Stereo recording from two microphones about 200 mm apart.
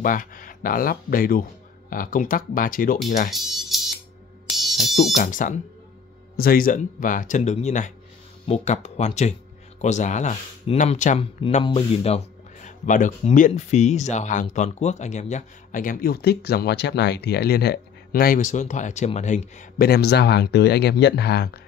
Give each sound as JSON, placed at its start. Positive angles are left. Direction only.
{"t": 0.0, "sound": "speech", "side_deg": 45}
{"t": 3.3, "sound": "music", "side_deg": 0}
{"t": 5.1, "sound": "speech", "side_deg": 40}